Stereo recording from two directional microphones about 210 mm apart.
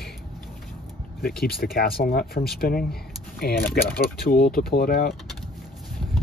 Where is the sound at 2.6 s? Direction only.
45° left (ahead or behind).